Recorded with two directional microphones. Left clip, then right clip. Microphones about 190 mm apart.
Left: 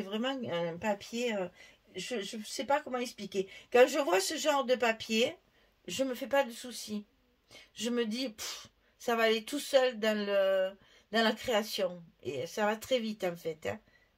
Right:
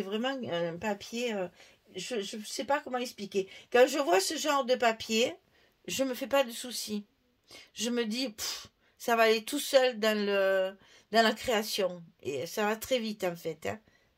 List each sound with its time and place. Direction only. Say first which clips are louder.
0.0 s speech: right 2 dB; 40° right (ahead or behind)